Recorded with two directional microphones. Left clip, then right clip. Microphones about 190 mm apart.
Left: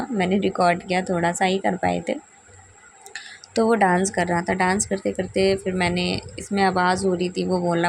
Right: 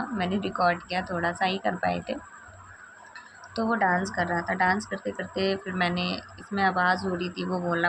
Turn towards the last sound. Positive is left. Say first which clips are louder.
# left 5 dB
turn(degrees=40)  # may be behind; listen again after turning